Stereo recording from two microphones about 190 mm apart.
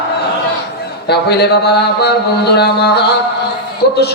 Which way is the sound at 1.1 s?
60° left (ahead or behind).